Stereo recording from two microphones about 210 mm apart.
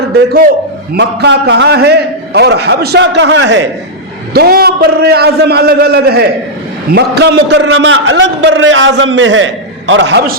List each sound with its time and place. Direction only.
0.3 s a man's voice: 50° right (ahead or behind)
4.4 s a man's voice: 45° right (ahead or behind)